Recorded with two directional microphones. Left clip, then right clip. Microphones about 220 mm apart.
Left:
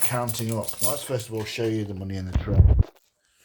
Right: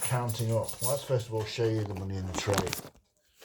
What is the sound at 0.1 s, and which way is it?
Speech, 55° left (ahead or behind).